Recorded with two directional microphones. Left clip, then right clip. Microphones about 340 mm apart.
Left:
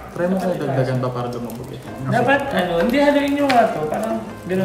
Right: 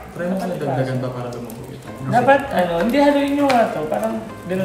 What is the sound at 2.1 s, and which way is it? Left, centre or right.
A man's voice, centre.